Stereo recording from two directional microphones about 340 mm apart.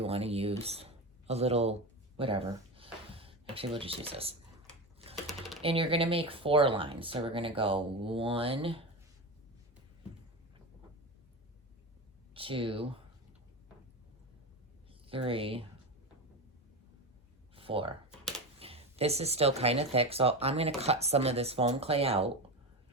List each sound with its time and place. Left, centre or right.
0.0 s speech: centre
5.1 s typing: centre
5.6 s speech: centre
12.3 s speech: centre
15.0 s speech: centre
17.5 s a sound: centre
18.6 s speech: centre